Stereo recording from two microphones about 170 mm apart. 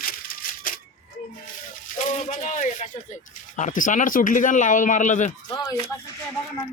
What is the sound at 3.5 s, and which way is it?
Speech, 50° left (ahead or behind).